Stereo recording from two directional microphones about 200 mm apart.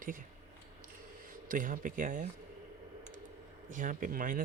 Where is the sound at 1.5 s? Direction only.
45° right (ahead or behind).